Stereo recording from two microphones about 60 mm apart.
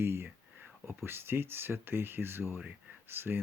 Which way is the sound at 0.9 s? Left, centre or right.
Right.